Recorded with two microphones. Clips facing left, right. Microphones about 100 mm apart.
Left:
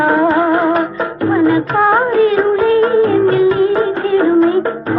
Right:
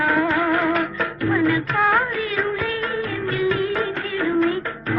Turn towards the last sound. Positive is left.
turn(degrees=35)  # may be behind; listen again after turning